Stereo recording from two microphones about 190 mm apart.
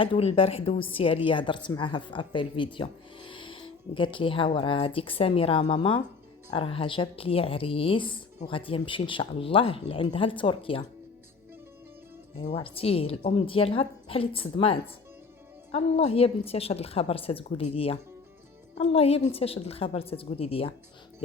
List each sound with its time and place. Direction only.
0.0 s speech: 30° left (ahead or behind)
2.7 s music: 25° left (ahead or behind)
4.5 s speech: 25° left (ahead or behind)
12.4 s a woman's voice: 35° left (ahead or behind)